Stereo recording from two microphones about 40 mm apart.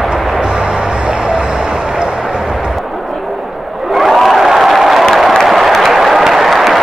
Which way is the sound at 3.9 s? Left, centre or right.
Centre.